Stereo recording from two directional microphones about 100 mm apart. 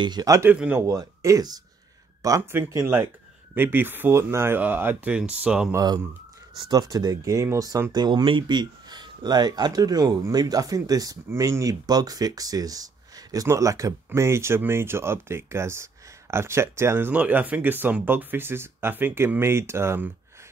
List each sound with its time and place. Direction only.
0.0 s speech: 45° right (ahead or behind)
0.5 s speech: 15° right (ahead or behind)
0.7 s speech: 35° right (ahead or behind); by 5.7 s 10° right (ahead or behind)
5.7 s speech: 35° right (ahead or behind)